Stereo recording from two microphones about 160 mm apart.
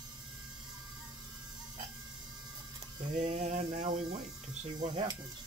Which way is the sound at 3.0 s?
45° right (ahead or behind).